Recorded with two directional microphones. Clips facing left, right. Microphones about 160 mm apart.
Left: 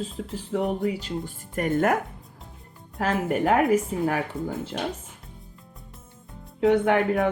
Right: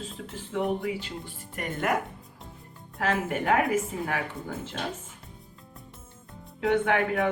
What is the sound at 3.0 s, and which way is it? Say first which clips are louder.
Speech: left 4 dB; 35° left (ahead or behind).